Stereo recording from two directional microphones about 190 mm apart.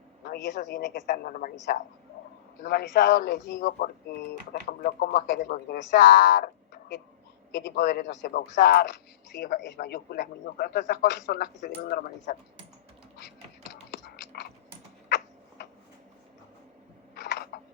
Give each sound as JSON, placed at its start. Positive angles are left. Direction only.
{"t": 0.3, "sound": "a man's voice", "side_deg": 65}
{"t": 1.1, "sound": "a man's voice", "side_deg": 45}
{"t": 17.2, "sound": "a sound", "side_deg": 60}